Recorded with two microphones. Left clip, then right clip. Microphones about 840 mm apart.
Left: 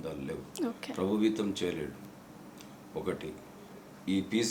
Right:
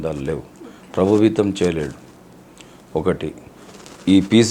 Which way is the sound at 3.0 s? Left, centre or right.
Right.